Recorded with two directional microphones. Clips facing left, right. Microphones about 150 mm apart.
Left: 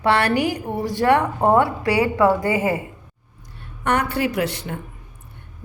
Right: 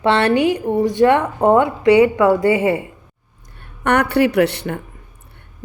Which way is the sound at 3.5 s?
65° right (ahead or behind).